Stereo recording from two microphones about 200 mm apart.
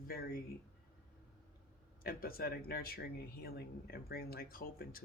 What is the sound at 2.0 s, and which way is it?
Speech, 50° left (ahead or behind).